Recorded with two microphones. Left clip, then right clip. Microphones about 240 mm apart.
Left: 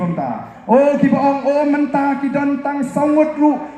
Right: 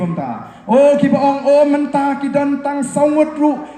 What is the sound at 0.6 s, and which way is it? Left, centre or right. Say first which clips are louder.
A man's voice: right 2 dB; right.